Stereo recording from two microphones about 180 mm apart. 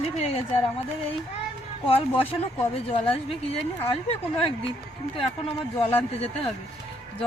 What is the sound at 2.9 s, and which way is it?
Speech, 30° left (ahead or behind).